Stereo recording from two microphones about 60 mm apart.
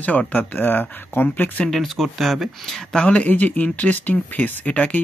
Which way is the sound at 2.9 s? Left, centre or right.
Left.